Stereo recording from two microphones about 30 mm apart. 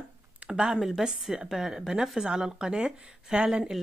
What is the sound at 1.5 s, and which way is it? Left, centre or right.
Speech, centre.